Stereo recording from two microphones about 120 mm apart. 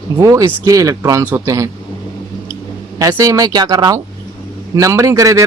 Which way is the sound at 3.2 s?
30° right (ahead or behind).